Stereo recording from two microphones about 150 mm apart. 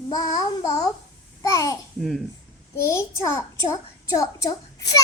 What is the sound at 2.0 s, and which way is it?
Speech, centre (ahead or behind).